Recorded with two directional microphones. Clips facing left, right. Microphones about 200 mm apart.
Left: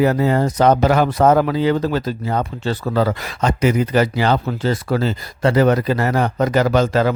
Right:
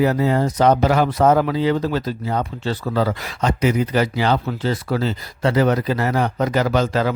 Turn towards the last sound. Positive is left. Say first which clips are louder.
# left 3 dB
turn(degrees=45)  # may be behind; listen again after turning